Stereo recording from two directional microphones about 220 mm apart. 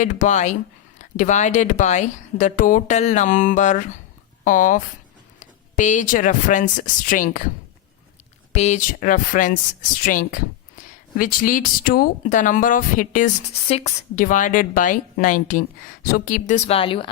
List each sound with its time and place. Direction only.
0.0 s speech: 35° left (ahead or behind)
8.5 s speech: 30° left (ahead or behind)